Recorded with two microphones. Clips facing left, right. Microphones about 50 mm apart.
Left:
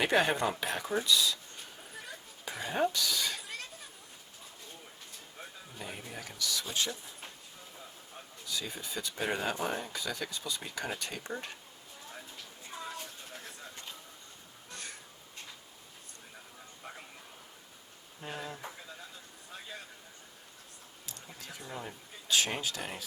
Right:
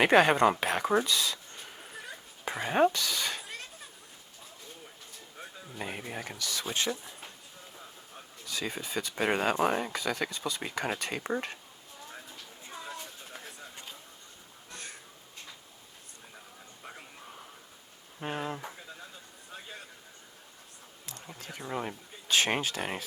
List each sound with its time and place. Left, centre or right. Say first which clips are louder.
0.0 s speech: right 6 dB; right
2.4 s speech: right 6 dB; right
5.8 s speech: right 5 dB; right
8.4 s speech: right 4 dB; right
10.9 s speech: right 6 dB; right
12.7 s a sound: even; centre
16.8 s a sound: even; right
18.3 s speech: right 6 dB; right
21.4 s a sound: right 6 dB; right
21.8 s speech: right 6 dB; right